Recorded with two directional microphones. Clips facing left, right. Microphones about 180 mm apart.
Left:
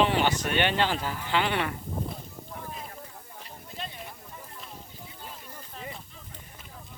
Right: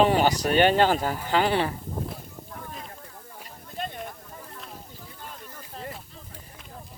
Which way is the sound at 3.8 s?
50° right (ahead or behind).